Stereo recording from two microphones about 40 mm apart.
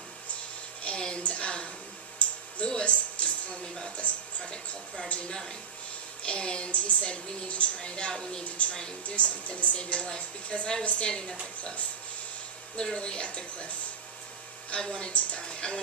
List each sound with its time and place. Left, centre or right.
0.9 s a sound: left
2.1 s speech: left
5.3 s a woman's voice: centre
8.5 s a woman's voice: left
12.7 s a woman's voice: left
15.1 s a woman's voice: left